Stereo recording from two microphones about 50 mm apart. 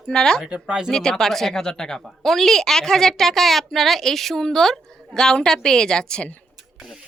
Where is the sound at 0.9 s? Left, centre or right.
Centre.